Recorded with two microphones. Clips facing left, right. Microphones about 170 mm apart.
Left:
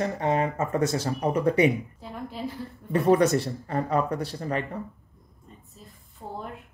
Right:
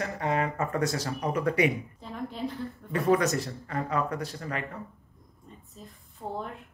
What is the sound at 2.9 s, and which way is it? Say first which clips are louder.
Speech: left 4 dB; 30° left (ahead or behind).